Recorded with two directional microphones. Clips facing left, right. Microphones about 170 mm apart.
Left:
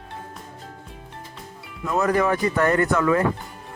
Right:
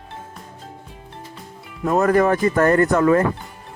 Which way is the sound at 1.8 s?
45° right (ahead or behind).